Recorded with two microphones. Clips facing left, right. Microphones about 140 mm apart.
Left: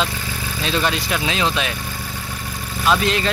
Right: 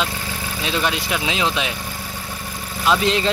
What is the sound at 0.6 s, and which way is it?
Speech, 10° right (ahead or behind).